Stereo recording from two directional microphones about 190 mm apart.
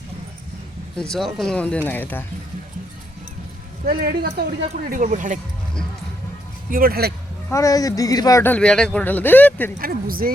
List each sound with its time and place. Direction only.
0.9 s speech: 5° left (ahead or behind)
3.8 s speech: 55° right (ahead or behind)
6.7 s speech: 50° right (ahead or behind)
7.5 s speech: 15° left (ahead or behind)
9.8 s speech: 50° right (ahead or behind)